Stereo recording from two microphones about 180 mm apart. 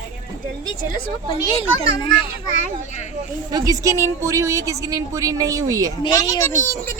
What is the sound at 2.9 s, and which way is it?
Speech, 40° left (ahead or behind).